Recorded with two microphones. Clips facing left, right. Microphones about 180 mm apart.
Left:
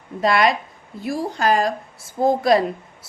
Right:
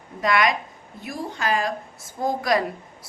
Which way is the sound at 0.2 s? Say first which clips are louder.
Left 3 dB; 30° left (ahead or behind).